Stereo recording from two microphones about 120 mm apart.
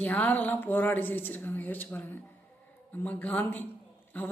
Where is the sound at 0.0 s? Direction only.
10° left (ahead or behind).